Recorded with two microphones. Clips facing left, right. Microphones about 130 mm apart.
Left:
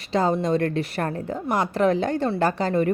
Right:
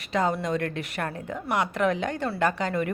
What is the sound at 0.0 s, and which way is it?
A woman's voice, 30° left (ahead or behind).